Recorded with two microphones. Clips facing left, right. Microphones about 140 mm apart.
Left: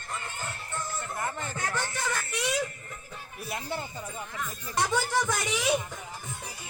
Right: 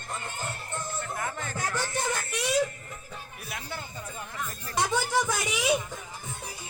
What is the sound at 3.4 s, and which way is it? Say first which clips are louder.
Music: left 5 dB; 25° left (ahead or behind).